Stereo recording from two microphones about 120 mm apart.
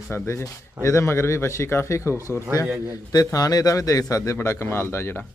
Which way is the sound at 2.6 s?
25° right (ahead or behind).